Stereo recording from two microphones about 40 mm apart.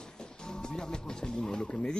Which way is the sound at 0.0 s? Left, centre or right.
Centre.